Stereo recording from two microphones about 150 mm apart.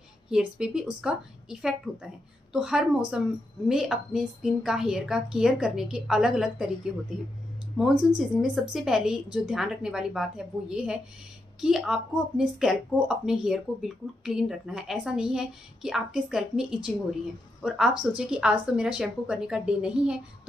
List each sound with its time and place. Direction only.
0.3 s speech: 5° right (ahead or behind)
8.2 s speech: 5° right (ahead or behind)